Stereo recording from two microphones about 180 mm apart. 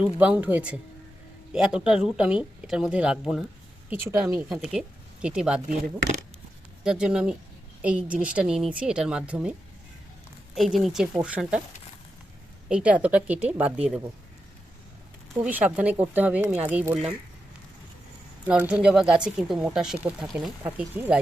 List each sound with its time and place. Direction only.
0.2 s speech: 5° right (ahead or behind)
6.8 s speech: 5° right (ahead or behind)
12.6 s speech: 5° right (ahead or behind)
15.4 s speech: 10° right (ahead or behind)
16.9 s speech: 35° right (ahead or behind)
18.4 s speech: 5° right (ahead or behind)